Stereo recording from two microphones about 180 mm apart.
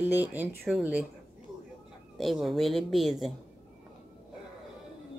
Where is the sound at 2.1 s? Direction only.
Centre (ahead or behind).